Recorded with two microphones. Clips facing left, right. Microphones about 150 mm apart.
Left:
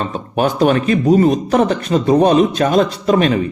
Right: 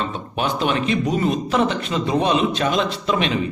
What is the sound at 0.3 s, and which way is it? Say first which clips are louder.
Speech: left 8 dB; 45° left (ahead or behind).